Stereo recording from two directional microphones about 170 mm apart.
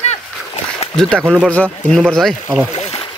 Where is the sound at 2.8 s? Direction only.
35° left (ahead or behind).